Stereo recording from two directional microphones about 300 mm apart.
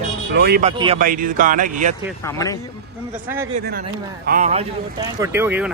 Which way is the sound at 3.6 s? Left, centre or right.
Right.